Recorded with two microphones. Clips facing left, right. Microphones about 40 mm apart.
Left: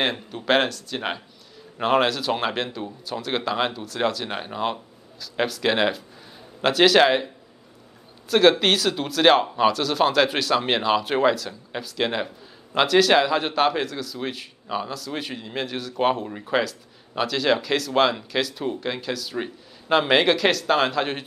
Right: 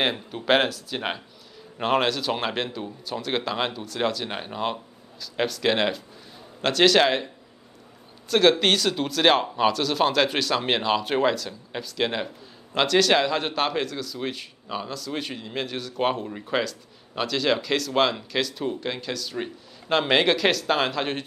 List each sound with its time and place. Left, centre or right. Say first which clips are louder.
0.0 s a man's voice: even; centre
8.3 s a man's voice: left 2 dB; centre